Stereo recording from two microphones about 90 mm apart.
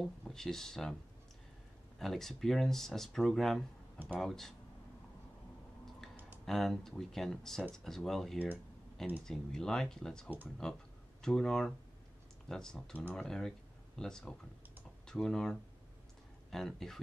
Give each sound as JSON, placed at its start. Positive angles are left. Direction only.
{"t": 0.0, "sound": "speech", "side_deg": 5}
{"t": 2.0, "sound": "speech", "side_deg": 5}
{"t": 6.4, "sound": "speech", "side_deg": 5}
{"t": 12.9, "sound": "speech", "side_deg": 20}
{"t": 13.2, "sound": "speech", "side_deg": 5}